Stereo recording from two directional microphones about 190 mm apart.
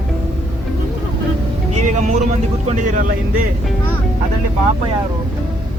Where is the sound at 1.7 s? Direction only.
40° right (ahead or behind).